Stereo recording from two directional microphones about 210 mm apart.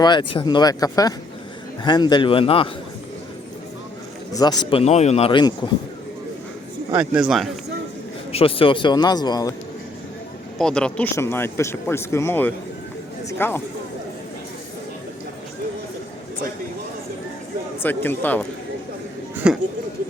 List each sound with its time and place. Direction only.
0.0 s speech: 20° left (ahead or behind)
4.3 s speech: 20° left (ahead or behind)
6.9 s a man's voice: 5° right (ahead or behind)
8.3 s speech: 25° left (ahead or behind)
10.6 s speech: 5° left (ahead or behind)
17.8 s speech: 10° left (ahead or behind)